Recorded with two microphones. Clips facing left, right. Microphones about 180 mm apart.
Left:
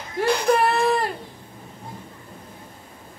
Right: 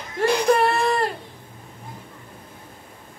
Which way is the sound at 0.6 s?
Centre (ahead or behind).